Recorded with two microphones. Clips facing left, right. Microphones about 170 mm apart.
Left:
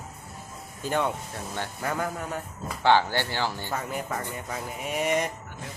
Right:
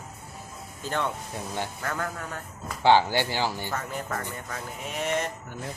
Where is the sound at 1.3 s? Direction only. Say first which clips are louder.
Right 2 dB; 15° right (ahead or behind).